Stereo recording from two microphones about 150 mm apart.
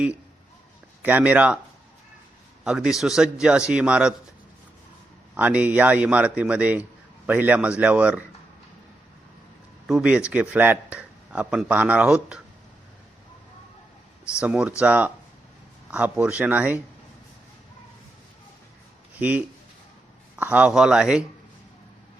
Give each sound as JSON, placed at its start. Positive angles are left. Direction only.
{"t": 1.0, "sound": "speech", "side_deg": -10}
{"t": 2.6, "sound": "a man's voice", "side_deg": -5}
{"t": 5.4, "sound": "speech", "side_deg": -10}
{"t": 9.8, "sound": "speech", "side_deg": -5}
{"t": 14.3, "sound": "speech", "side_deg": -5}
{"t": 19.2, "sound": "speech", "side_deg": -10}